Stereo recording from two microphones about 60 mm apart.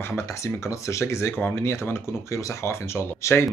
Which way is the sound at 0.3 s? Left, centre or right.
Left.